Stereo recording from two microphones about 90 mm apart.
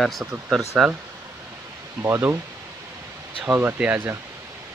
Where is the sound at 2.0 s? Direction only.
30° right (ahead or behind).